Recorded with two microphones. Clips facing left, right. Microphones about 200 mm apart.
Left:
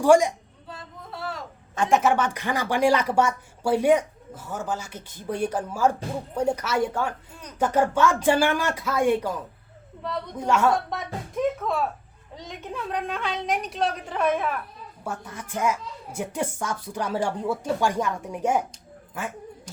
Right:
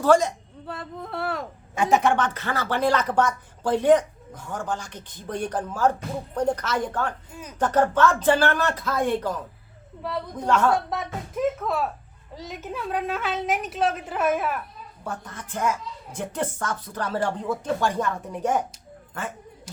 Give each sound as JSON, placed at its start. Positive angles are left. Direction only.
{"t": 0.0, "sound": "speech", "side_deg": 10}
{"t": 0.7, "sound": "speech", "side_deg": -60}
{"t": 1.7, "sound": "a woman's voice", "side_deg": -10}
{"t": 2.0, "sound": "speech", "side_deg": 5}
{"t": 10.3, "sound": "speech", "side_deg": 10}
{"t": 10.8, "sound": "a woman's voice", "side_deg": 0}
{"t": 15.0, "sound": "speech", "side_deg": 10}
{"t": 19.7, "sound": "a sound", "side_deg": -5}